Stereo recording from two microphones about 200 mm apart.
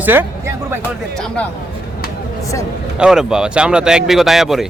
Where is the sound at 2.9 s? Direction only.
5° right (ahead or behind).